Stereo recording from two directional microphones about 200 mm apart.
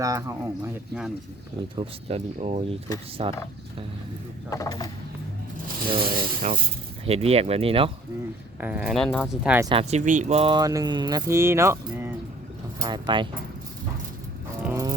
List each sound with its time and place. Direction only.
0.0 s speech: 15° right (ahead or behind)
1.7 s speech: 30° right (ahead or behind)
4.4 s speech: 15° left (ahead or behind)
5.6 s a sound: 45° right (ahead or behind)
6.4 s speech: 35° right (ahead or behind)
8.6 s speech: 5° right (ahead or behind)
9.6 s speech: 30° right (ahead or behind); by 12.1 s 10° right (ahead or behind)
12.8 s speech: 25° right (ahead or behind)
14.6 s a sound: 15° right (ahead or behind)